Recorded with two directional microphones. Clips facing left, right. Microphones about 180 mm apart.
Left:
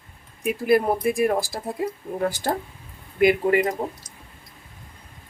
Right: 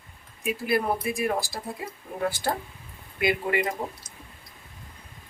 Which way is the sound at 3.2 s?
40° left (ahead or behind).